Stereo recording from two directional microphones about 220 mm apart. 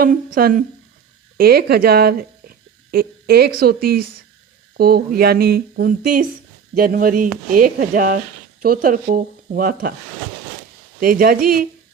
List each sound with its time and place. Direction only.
0.0 s speech: 40° right (ahead or behind)
11.0 s speech: 40° right (ahead or behind)